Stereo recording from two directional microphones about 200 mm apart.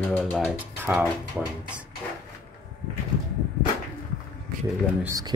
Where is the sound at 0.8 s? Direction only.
10° right (ahead or behind).